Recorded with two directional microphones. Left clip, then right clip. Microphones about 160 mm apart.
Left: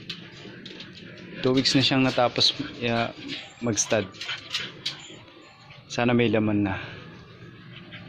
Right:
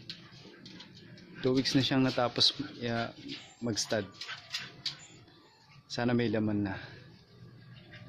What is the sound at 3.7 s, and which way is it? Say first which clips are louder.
Speech: left 8 dB; 20° right (ahead or behind).